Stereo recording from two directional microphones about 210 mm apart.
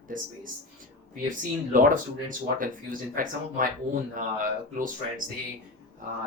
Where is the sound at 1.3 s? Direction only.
40° right (ahead or behind).